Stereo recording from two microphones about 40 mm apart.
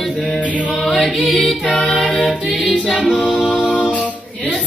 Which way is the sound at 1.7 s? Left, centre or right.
Centre.